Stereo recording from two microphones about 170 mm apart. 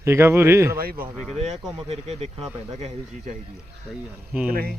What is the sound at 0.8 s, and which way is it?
Speech, 60° right (ahead or behind).